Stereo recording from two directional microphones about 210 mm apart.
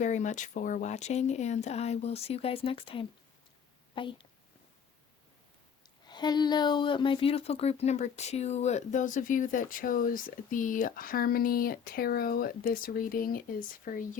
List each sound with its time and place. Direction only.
0.0 s a woman's voice: 35° left (ahead or behind)
6.1 s speech: 20° left (ahead or behind); by 14.0 s 40° left (ahead or behind)